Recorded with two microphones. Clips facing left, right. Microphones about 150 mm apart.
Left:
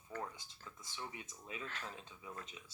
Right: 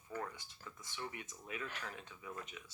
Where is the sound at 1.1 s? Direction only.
55° right (ahead or behind).